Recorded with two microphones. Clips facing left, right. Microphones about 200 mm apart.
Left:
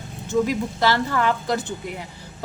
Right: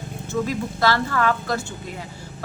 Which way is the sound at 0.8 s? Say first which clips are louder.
Even; 15° left (ahead or behind).